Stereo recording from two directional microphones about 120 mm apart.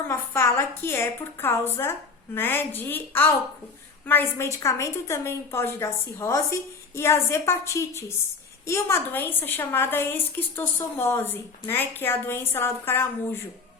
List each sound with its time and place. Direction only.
0.1 s a woman's voice: 25° left (ahead or behind)